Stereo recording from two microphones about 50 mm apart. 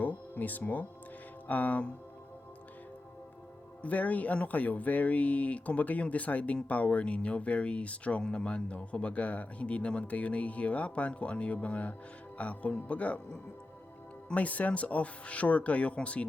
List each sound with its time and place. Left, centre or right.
0.0 s speech: left
3.8 s speech: left
14.3 s speech: left